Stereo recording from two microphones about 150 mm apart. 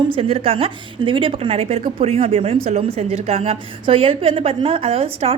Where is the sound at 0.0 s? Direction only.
40° right (ahead or behind).